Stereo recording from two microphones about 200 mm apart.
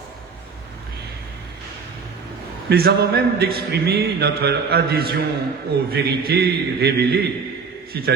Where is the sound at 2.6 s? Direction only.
50° right (ahead or behind).